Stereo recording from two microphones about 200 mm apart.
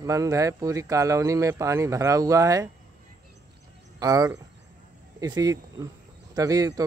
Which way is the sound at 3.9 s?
20° right (ahead or behind).